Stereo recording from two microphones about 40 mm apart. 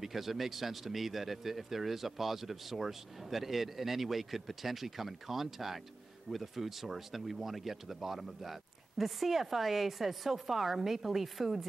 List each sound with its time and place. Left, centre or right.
0.0 s speech: centre